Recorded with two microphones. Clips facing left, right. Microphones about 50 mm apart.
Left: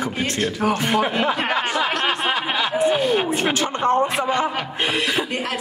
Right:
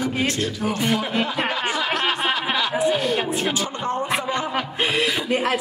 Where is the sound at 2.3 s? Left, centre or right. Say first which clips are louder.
Left 1 dB; centre.